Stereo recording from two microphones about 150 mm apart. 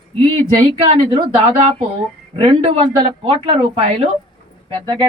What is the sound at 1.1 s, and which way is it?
Speech, 40° right (ahead or behind).